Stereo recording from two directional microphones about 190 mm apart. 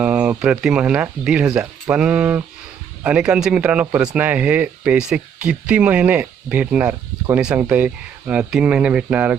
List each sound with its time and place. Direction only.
0.0 s speech: 5° right (ahead or behind)